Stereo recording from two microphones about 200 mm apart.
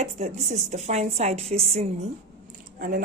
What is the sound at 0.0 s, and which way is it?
A woman's voice, 35° right (ahead or behind).